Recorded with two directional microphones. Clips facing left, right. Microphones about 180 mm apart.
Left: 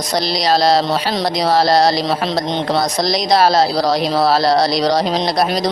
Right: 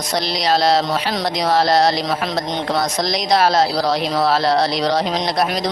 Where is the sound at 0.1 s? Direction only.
35° left (ahead or behind).